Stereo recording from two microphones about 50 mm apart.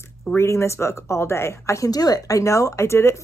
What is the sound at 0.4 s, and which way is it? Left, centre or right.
Speech, left.